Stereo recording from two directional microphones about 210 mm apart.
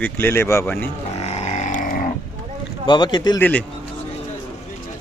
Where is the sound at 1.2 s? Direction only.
30° left (ahead or behind).